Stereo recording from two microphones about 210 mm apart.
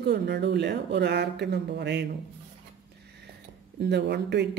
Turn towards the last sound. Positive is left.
turn(degrees=-55)  # may be behind; listen again after turning